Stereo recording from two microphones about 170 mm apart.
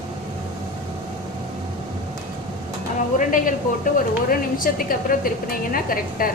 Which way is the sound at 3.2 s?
50° left (ahead or behind).